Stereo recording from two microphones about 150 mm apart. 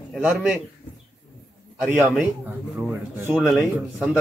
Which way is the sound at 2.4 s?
10° right (ahead or behind).